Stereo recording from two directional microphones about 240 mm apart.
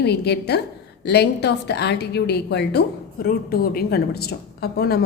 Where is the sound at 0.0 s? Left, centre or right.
Left.